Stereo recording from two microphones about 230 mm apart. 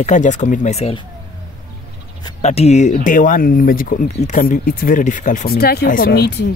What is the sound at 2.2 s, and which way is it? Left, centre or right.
Speech, left.